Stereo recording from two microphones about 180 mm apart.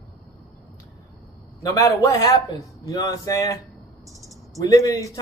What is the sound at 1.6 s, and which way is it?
Speech, 20° left (ahead or behind).